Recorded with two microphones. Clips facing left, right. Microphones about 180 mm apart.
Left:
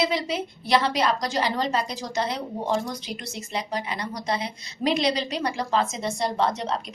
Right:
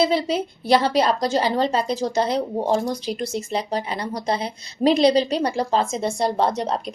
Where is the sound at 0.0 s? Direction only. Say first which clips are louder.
Right 5 dB; 35° right (ahead or behind).